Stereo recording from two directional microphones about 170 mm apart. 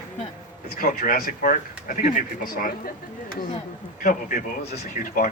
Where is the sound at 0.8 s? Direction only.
55° left (ahead or behind).